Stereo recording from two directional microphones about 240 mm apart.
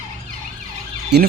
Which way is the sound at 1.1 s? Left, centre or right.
Right.